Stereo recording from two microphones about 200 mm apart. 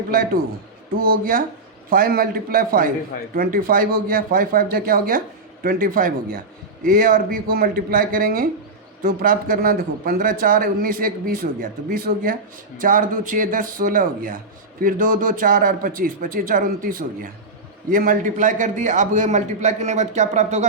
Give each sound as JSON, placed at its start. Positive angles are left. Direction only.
{"t": 0.9, "sound": "a man's voice", "side_deg": -45}